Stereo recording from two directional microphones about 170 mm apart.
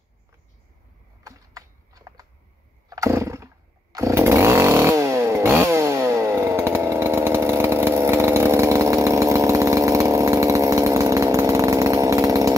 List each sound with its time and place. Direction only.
1.2 s typing: 20° right (ahead or behind)
2.9 s chainsaw: 20° right (ahead or behind)